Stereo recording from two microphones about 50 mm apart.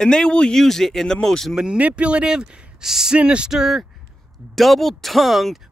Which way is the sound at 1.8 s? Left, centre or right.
Right.